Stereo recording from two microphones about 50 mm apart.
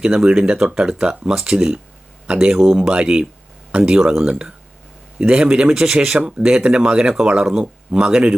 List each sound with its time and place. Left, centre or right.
0.0 s speech: centre